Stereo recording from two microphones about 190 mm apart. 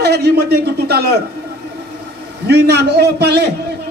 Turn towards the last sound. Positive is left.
turn(degrees=-60)  # may be behind; listen again after turning